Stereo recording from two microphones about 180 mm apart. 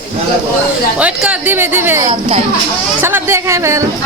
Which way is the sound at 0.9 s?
5° right (ahead or behind).